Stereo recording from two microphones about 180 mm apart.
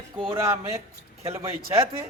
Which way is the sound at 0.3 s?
15° right (ahead or behind).